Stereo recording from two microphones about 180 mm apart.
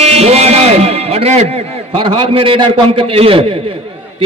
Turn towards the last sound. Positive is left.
turn(degrees=-30)  # may be behind; listen again after turning